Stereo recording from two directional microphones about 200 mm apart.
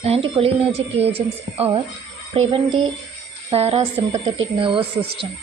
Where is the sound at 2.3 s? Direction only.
25° right (ahead or behind).